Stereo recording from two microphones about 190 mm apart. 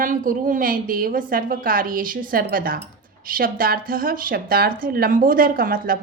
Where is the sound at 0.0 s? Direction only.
45° right (ahead or behind).